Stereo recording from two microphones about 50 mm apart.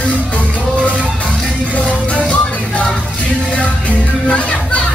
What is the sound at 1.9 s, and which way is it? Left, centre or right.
Music, left.